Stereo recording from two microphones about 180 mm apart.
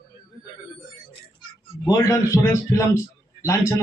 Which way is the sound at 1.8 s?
20° left (ahead or behind).